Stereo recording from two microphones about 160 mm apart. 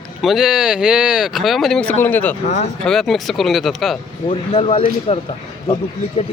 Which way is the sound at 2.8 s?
Centre (ahead or behind).